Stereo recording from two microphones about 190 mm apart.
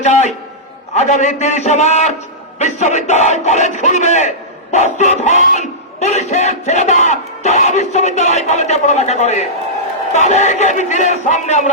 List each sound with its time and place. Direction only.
0.0 s speech: 40° left (ahead or behind)